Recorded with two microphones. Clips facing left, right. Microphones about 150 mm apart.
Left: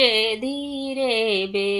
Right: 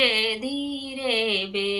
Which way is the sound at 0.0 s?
25° left (ahead or behind).